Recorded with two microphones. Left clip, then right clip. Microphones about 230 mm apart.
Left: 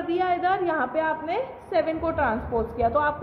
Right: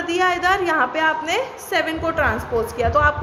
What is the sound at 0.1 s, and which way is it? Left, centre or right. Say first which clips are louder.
A woman's voice: right 5 dB; centre.